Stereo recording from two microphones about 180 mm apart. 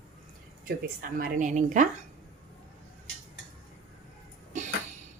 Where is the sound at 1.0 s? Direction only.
50° right (ahead or behind).